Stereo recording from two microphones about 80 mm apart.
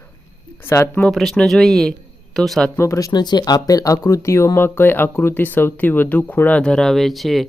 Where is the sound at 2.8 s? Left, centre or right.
Left.